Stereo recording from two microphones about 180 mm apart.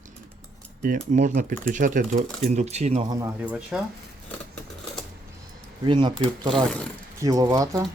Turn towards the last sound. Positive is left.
turn(degrees=-20)  # may be behind; listen again after turning